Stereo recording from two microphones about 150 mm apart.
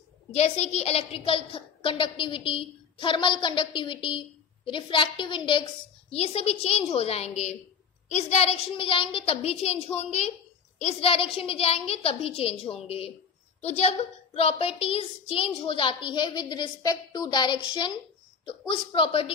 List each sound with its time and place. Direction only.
0.3 s a woman's voice: 45° left (ahead or behind)